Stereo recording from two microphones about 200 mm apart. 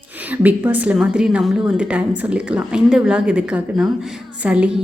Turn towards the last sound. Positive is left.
turn(degrees=-5)  # may be behind; listen again after turning